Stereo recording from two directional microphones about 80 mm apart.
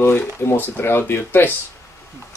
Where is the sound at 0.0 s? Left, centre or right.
Left.